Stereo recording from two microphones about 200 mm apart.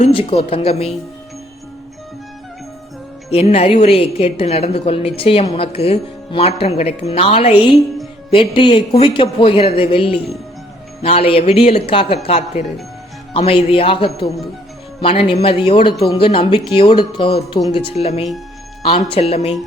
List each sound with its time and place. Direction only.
0.0 s a woman's voice: 25° left (ahead or behind)
3.2 s a woman's voice: 30° left (ahead or behind)